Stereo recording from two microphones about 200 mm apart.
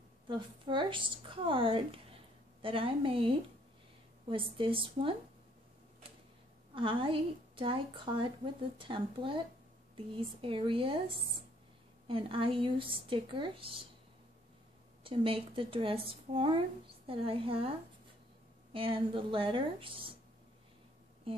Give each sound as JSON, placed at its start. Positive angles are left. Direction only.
{"t": 0.3, "sound": "speech", "side_deg": -25}
{"t": 6.7, "sound": "speech", "side_deg": -25}
{"t": 12.1, "sound": "speech", "side_deg": -25}
{"t": 15.0, "sound": "speech", "side_deg": -25}
{"t": 21.3, "sound": "a sound", "side_deg": -25}